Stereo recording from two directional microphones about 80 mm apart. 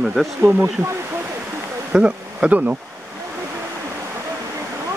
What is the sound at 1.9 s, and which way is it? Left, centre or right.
Speech, centre.